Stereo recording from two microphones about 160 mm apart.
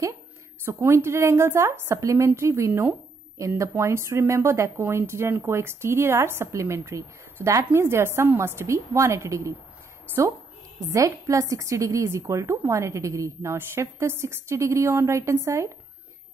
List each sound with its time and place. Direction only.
0.7 s speech: 15° right (ahead or behind)
10.9 s a woman's voice: 20° right (ahead or behind)